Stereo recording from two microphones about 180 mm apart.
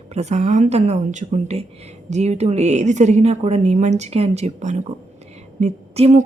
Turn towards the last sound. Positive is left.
turn(degrees=-40)  # may be behind; listen again after turning